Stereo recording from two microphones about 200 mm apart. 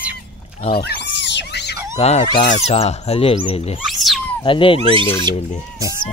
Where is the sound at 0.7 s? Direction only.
60° left (ahead or behind).